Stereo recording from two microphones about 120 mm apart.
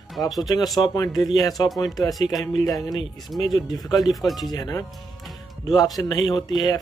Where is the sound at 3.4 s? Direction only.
35° left (ahead or behind).